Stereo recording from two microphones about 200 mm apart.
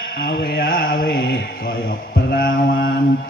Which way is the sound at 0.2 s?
50° left (ahead or behind).